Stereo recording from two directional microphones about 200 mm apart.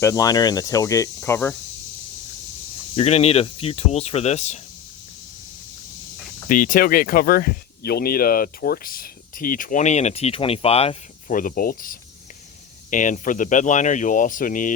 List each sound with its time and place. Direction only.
0.0 s speech: 15° left (ahead or behind)
2.9 s speech: 30° left (ahead or behind)
6.5 s speech: 40° left (ahead or behind)
11.3 s speech: 45° left (ahead or behind)